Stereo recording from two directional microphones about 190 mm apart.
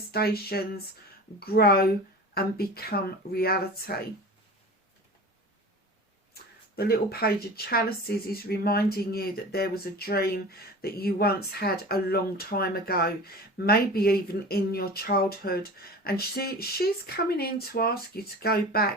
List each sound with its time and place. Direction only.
0.1 s speech: 55° left (ahead or behind)
6.3 s speech: 55° left (ahead or behind)